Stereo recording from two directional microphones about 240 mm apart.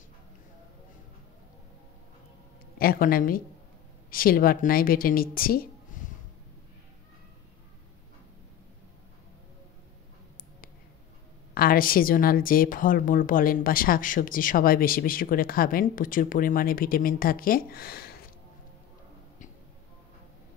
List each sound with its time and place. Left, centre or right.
2.8 s a woman's voice: left
11.5 s a woman's voice: left